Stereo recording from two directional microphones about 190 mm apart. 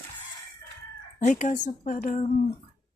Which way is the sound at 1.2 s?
40° left (ahead or behind).